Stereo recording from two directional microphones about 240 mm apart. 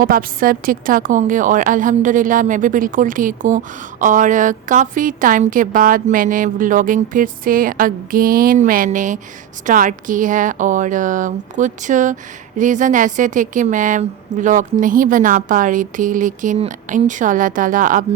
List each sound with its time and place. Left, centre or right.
0.0 s a woman's voice: right